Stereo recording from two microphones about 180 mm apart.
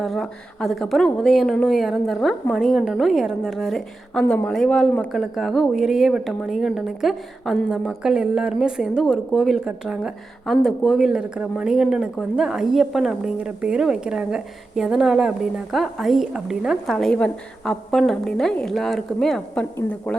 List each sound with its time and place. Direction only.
0.0 s speech: centre (ahead or behind)